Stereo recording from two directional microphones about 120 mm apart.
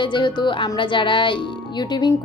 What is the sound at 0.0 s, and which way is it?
A woman's voice, 40° left (ahead or behind).